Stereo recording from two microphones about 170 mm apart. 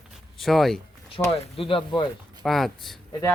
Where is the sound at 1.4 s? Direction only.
35° left (ahead or behind).